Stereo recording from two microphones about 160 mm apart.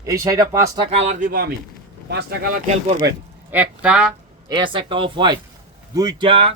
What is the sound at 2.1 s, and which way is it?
Speech, 90° right.